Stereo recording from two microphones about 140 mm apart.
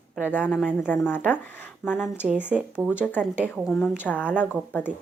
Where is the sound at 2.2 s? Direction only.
5° right (ahead or behind).